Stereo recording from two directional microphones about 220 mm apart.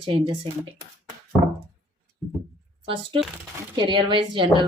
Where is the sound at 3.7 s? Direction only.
20° right (ahead or behind).